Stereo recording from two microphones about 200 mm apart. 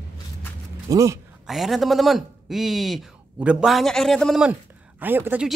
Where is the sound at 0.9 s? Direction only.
15° right (ahead or behind).